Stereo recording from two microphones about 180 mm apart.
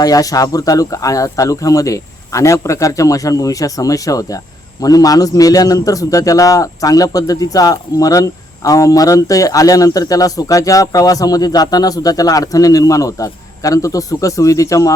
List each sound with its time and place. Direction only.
0.0 s a man's voice: 20° left (ahead or behind)